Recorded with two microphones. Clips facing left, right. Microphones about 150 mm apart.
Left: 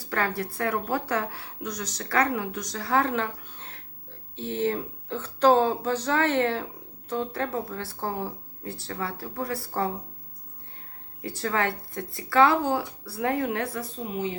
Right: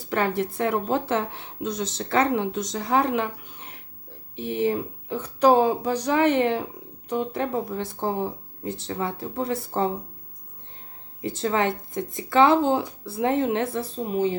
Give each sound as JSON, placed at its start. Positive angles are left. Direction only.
{"t": 0.0, "sound": "a woman's voice", "side_deg": -20}
{"t": 11.2, "sound": "a woman's voice", "side_deg": -20}